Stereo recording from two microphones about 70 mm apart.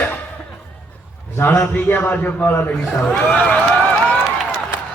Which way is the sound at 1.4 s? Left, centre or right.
Left.